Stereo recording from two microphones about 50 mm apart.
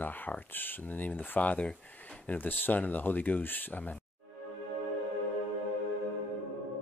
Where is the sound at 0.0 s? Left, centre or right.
Left.